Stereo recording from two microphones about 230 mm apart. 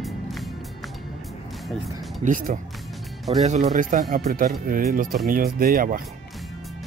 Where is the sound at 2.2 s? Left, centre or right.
Right.